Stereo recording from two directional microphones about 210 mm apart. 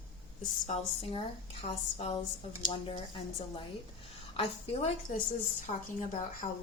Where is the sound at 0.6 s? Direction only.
30° left (ahead or behind).